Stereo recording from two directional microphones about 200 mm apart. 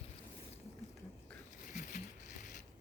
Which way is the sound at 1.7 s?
40° left (ahead or behind).